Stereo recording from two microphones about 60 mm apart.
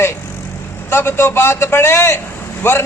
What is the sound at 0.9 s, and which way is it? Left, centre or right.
A man's voice, left.